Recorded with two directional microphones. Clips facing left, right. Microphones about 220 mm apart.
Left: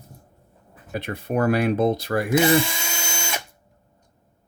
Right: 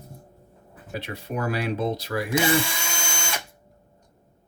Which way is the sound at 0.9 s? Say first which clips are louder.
Left 6 dB; 55° left (ahead or behind).